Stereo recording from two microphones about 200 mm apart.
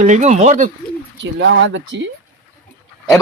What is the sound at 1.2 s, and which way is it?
Speech, 65° right (ahead or behind).